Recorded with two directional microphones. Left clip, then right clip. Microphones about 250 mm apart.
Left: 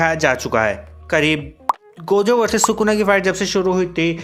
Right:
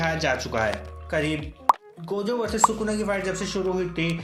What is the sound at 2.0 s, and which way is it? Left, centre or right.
Speech, left.